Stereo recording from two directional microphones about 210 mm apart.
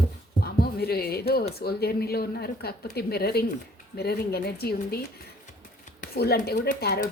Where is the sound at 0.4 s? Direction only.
45° left (ahead or behind).